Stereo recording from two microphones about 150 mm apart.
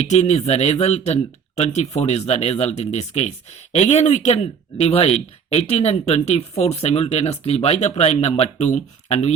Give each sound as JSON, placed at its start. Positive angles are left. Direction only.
{"t": 0.1, "sound": "speech", "side_deg": 50}